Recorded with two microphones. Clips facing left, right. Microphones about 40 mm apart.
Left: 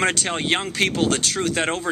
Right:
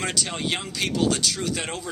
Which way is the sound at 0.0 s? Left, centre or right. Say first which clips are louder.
Left 6 dB; left.